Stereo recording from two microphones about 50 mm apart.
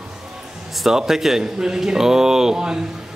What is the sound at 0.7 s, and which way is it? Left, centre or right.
Speech, centre.